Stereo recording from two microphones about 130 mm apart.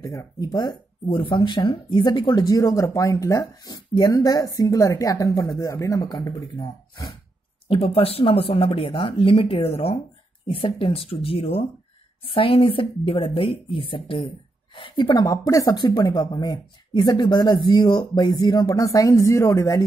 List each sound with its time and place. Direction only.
0.0 s speech: 25° left (ahead or behind)
7.6 s speech: 45° left (ahead or behind)
15.2 s speech: 25° left (ahead or behind)